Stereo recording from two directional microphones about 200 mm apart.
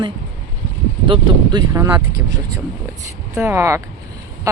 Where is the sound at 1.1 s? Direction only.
20° right (ahead or behind).